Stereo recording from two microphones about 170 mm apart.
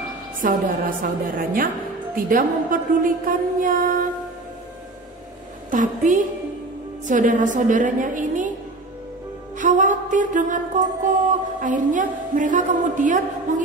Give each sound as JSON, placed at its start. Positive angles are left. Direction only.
{"t": 0.4, "sound": "a woman's voice", "side_deg": -55}
{"t": 5.7, "sound": "a woman's voice", "side_deg": -50}
{"t": 9.6, "sound": "music", "side_deg": -50}
{"t": 11.6, "sound": "a woman's voice", "side_deg": -50}